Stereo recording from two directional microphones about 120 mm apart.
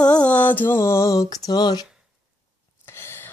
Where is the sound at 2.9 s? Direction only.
20° left (ahead or behind).